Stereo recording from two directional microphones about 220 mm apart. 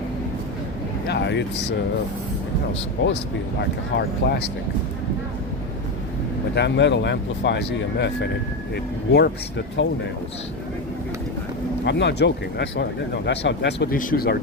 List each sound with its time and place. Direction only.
1.0 s a sound: 50° left (ahead or behind)
3.0 s speech: 60° left (ahead or behind)
3.6 s speech: 50° left (ahead or behind)
6.5 s speech: 50° left (ahead or behind)
11.9 s speech: 50° left (ahead or behind)